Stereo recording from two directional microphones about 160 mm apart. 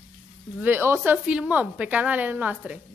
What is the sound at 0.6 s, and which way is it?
A woman's voice, 15° right (ahead or behind).